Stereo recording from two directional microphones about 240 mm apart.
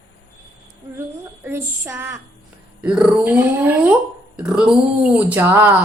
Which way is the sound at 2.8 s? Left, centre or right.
Centre.